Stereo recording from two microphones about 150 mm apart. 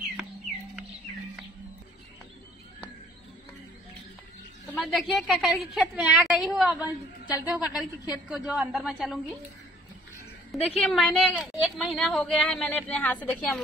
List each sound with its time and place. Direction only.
4.6 s a woman's voice: 5° left (ahead or behind)
7.8 s a woman's voice: 25° left (ahead or behind)
8.3 s speech: centre (ahead or behind)
10.5 s speech: centre (ahead or behind)